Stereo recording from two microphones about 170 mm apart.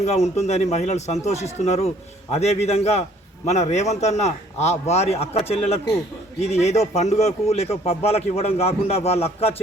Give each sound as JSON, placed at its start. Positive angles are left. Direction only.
{"t": 0.0, "sound": "a man's voice", "side_deg": 40}